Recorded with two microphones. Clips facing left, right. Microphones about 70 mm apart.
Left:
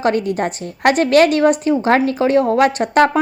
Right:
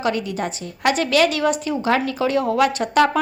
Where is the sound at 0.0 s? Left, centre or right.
Left.